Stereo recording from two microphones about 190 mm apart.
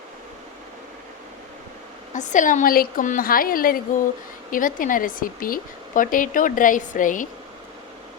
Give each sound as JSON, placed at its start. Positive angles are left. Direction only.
{"t": 2.1, "sound": "speech", "side_deg": 40}